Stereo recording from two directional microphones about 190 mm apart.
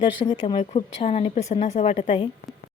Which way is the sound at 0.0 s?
25° left (ahead or behind).